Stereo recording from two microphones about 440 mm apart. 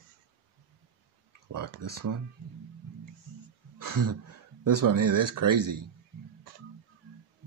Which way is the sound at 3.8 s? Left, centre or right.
Right.